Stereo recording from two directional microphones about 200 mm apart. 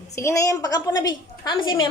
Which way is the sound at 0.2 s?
15° left (ahead or behind).